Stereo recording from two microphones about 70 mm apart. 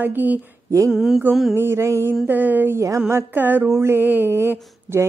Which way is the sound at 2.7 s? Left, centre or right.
Right.